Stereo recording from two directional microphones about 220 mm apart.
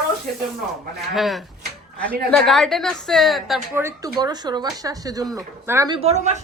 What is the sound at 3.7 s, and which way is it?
Speech, 10° right (ahead or behind).